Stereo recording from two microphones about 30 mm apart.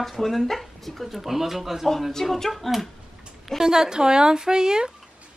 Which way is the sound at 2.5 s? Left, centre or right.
Centre.